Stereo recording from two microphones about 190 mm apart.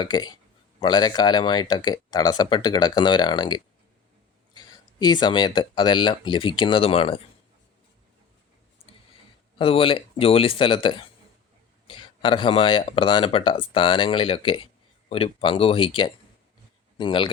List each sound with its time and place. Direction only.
0.0 s speech: 20° left (ahead or behind)
9.6 s speech: 30° left (ahead or behind)